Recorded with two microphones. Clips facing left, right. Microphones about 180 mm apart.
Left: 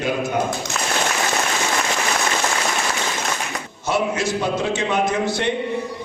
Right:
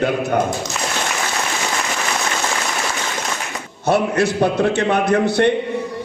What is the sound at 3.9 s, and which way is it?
A man's voice, 60° right (ahead or behind).